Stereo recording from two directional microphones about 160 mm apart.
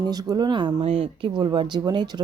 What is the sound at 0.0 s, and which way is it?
Speech, 25° right (ahead or behind).